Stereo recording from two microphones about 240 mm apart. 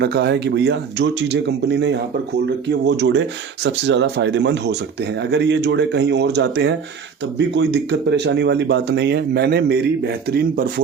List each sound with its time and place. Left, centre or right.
0.0 s speech: right